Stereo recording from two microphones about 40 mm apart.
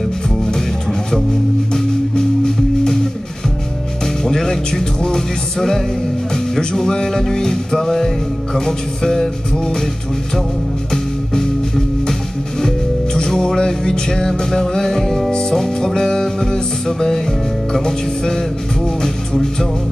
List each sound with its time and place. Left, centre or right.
0.4 s music: centre
4.0 s music: centre
10.9 s music: centre